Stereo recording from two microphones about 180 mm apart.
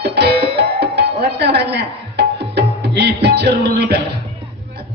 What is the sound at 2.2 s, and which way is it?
Tabla, 65° right (ahead or behind).